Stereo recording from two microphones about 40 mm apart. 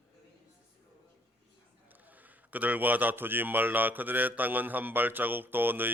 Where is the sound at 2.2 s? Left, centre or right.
Right.